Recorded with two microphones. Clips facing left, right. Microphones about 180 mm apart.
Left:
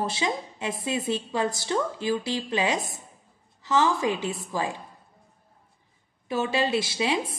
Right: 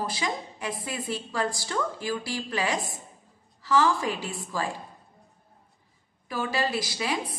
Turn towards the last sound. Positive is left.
turn(degrees=25)  # may be behind; listen again after turning